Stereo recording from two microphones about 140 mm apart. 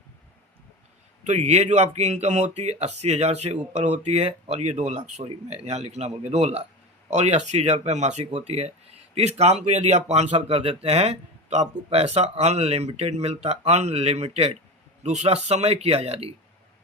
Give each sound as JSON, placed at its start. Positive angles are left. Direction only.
{"t": 1.2, "sound": "speech", "side_deg": -55}